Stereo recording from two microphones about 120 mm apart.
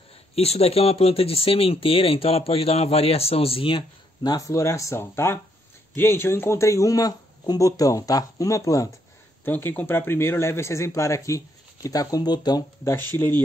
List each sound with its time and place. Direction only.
0.4 s speech: 60° left (ahead or behind); by 8.9 s 30° left (ahead or behind)
9.4 s speech: 20° left (ahead or behind); by 12.6 s 35° left (ahead or behind)